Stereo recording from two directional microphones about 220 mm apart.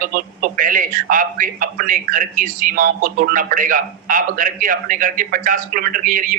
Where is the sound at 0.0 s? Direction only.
40° right (ahead or behind).